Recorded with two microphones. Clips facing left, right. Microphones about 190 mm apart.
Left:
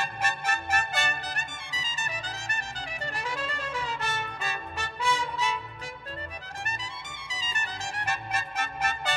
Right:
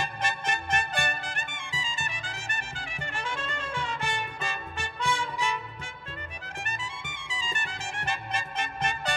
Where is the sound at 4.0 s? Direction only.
15° right (ahead or behind).